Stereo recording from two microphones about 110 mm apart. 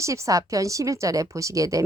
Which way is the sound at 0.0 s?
30° right (ahead or behind).